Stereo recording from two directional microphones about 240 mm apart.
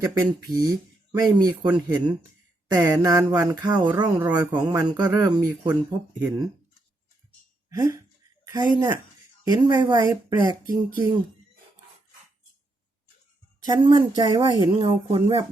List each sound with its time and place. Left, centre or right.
0.1 s speech: centre
2.7 s speech: centre
7.7 s speech: centre
13.7 s a woman's voice: centre